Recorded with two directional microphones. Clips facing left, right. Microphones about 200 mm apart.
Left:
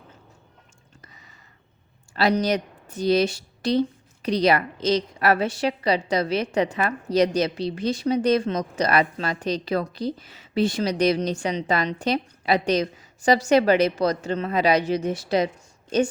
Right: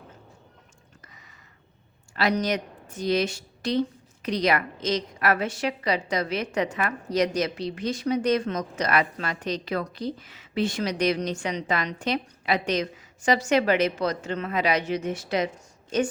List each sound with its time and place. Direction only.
2.1 s a woman's voice: 30° left (ahead or behind)